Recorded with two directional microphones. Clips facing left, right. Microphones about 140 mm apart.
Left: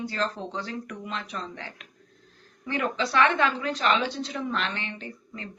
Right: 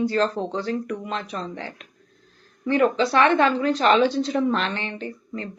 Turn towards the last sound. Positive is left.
turn(degrees=-35)  # may be behind; listen again after turning